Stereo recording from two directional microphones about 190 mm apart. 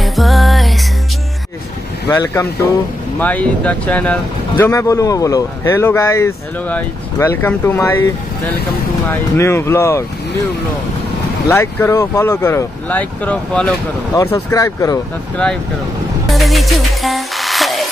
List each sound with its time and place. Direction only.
0.0 s music: centre (ahead or behind)
2.0 s speech: 15° left (ahead or behind)
9.1 s speech: 15° left (ahead or behind)
11.4 s speech: 15° left (ahead or behind)
14.1 s speech: 15° left (ahead or behind)
16.3 s music: centre (ahead or behind)